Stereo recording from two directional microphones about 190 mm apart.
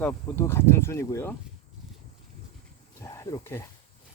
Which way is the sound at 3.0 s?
15° left (ahead or behind).